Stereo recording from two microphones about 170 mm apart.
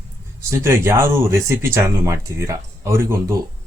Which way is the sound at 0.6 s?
15° right (ahead or behind).